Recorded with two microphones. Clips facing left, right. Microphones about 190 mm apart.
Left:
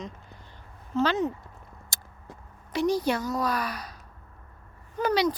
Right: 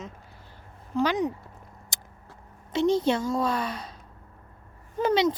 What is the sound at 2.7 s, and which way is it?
A woman's voice, 25° right (ahead or behind).